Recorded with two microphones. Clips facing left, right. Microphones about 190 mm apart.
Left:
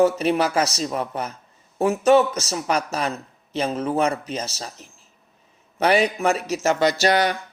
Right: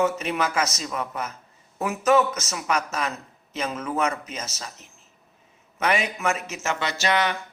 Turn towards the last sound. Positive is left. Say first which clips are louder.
# left 5 dB
turn(degrees=40)  # may be behind; listen again after turning